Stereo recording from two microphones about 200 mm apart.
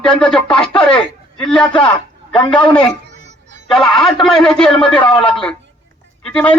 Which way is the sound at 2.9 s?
60° right (ahead or behind).